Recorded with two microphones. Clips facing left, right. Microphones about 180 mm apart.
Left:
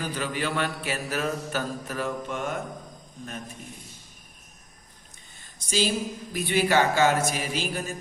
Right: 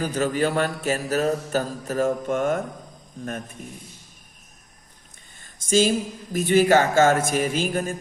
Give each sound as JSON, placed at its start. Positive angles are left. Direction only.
{"t": 0.0, "sound": "mantra", "side_deg": -45}
{"t": 5.4, "sound": "a sound", "side_deg": -50}
{"t": 6.3, "sound": "mantra", "side_deg": -45}